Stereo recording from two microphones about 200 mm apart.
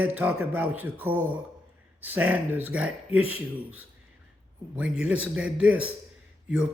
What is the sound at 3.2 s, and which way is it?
Speech, 90° right.